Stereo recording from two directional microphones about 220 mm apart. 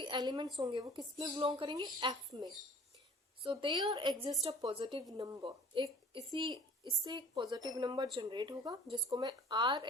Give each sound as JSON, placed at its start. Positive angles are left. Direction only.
{"t": 0.0, "sound": "a woman's voice", "side_deg": -20}